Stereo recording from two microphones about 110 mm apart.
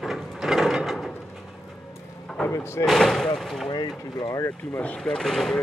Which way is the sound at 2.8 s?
Centre (ahead or behind).